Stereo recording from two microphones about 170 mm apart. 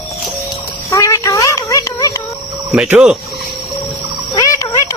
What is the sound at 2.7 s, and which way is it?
Speech, 5° right (ahead or behind).